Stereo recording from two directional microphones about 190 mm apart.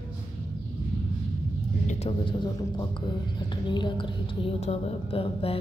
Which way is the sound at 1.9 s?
35° left (ahead or behind).